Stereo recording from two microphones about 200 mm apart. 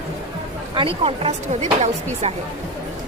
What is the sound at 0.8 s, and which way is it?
Speech, 30° right (ahead or behind).